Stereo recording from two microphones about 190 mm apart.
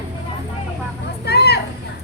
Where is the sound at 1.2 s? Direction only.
60° left (ahead or behind).